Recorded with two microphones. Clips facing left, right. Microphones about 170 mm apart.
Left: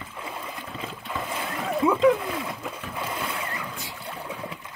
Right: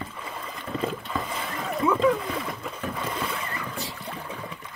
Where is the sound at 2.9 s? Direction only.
10° left (ahead or behind).